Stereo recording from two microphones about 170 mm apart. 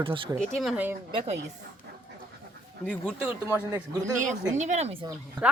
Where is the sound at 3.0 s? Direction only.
10° right (ahead or behind).